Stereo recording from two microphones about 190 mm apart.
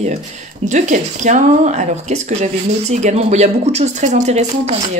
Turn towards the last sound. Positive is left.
turn(degrees=-35)  # may be behind; listen again after turning